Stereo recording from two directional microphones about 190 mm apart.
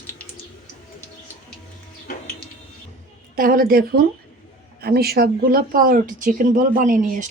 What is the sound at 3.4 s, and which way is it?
A woman's voice, 50° right (ahead or behind).